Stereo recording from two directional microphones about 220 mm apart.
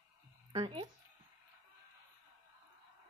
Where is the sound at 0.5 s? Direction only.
25° right (ahead or behind).